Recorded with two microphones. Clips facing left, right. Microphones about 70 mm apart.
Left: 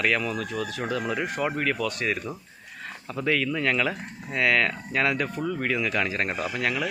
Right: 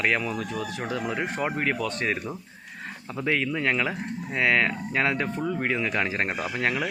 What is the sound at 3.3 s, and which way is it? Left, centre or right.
Speech, right.